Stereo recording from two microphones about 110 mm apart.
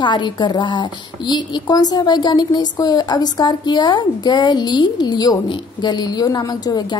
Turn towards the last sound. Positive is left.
turn(degrees=40)  # may be behind; listen again after turning